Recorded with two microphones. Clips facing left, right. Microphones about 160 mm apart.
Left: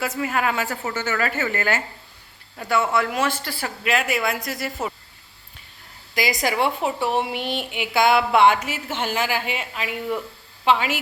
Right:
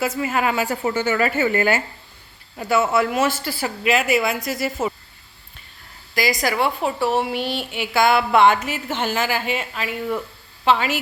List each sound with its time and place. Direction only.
0.0 s a woman's voice: 5° right (ahead or behind)
6.4 s a woman's voice: 20° left (ahead or behind)